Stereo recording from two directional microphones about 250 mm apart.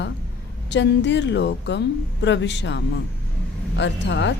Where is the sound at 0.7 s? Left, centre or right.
Left.